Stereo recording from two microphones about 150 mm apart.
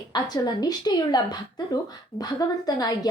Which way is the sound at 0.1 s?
25° left (ahead or behind).